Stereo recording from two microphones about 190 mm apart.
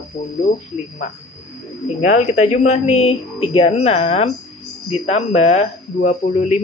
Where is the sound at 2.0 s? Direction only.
40° left (ahead or behind).